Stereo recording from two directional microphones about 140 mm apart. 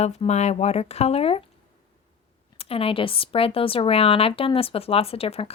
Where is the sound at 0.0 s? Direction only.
50° left (ahead or behind).